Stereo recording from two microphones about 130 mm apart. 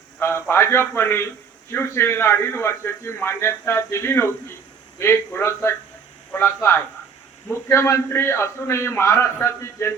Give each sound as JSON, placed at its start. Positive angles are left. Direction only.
{"t": 0.2, "sound": "a man's voice", "side_deg": 15}